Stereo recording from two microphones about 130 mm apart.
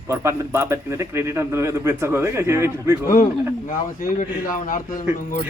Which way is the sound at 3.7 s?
85° left.